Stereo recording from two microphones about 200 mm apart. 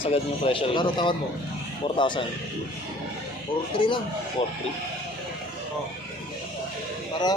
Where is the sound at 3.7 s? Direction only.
25° left (ahead or behind).